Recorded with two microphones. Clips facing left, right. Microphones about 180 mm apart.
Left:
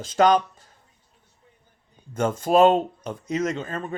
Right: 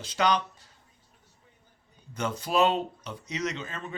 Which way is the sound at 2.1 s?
50° left (ahead or behind).